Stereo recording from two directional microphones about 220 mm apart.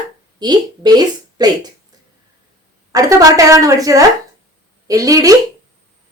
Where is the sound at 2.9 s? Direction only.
15° right (ahead or behind).